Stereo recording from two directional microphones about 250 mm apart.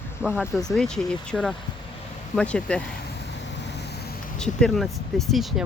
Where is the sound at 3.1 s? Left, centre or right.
Left.